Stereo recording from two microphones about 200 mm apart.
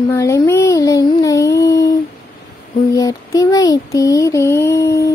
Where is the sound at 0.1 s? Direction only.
15° left (ahead or behind).